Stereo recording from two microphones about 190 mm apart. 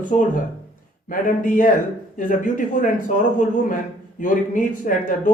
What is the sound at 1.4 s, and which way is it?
Speech, 45° left (ahead or behind).